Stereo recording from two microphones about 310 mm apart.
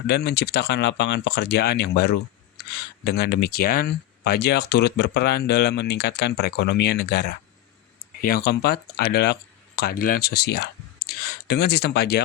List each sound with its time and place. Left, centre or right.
0.1 s speech: left